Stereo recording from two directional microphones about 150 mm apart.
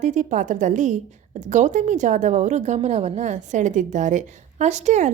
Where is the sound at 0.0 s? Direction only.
55° right (ahead or behind).